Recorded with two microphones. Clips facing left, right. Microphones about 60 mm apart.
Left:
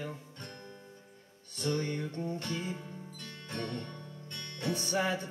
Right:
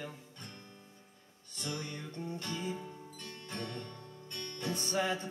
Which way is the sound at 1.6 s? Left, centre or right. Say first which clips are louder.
Left 8 dB; left.